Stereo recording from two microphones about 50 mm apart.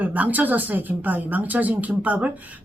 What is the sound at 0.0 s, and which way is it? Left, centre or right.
Speech, right.